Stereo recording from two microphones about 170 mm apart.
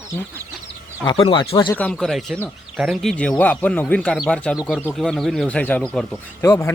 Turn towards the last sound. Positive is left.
turn(degrees=15)  # may be behind; listen again after turning